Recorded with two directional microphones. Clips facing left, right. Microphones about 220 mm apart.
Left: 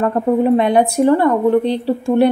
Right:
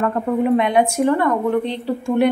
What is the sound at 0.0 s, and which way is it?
A woman's voice, 35° left (ahead or behind).